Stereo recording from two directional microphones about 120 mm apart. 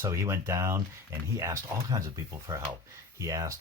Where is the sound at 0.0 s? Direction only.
20° right (ahead or behind).